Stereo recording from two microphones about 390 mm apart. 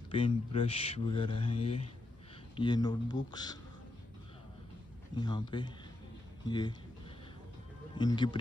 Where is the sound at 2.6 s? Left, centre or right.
Centre.